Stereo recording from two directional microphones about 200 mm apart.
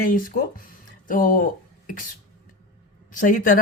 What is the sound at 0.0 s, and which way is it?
Speech, 45° left (ahead or behind).